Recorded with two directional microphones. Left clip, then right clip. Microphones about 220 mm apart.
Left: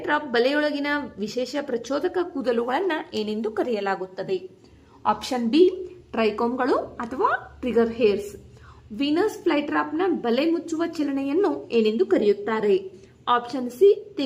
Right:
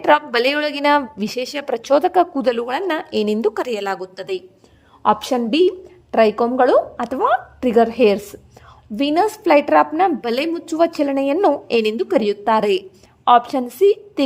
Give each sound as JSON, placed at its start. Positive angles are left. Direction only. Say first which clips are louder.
{"t": 0.0, "sound": "a woman's voice", "louder": "right 7 dB", "side_deg": -45}